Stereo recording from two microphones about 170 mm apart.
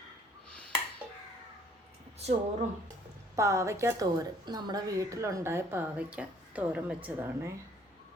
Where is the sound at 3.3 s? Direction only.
15° right (ahead or behind).